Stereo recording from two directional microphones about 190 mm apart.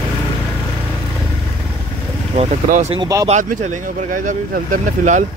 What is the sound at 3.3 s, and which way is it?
Speech, 40° right (ahead or behind).